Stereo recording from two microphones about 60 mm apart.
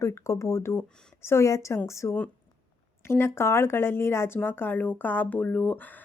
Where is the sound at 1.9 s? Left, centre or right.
Left.